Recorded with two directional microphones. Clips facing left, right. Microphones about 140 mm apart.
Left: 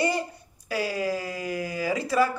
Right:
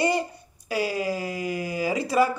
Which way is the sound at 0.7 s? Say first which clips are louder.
Right 1 dB; 20° right (ahead or behind).